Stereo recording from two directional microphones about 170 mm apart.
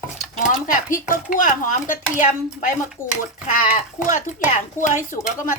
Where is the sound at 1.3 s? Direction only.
50° left (ahead or behind).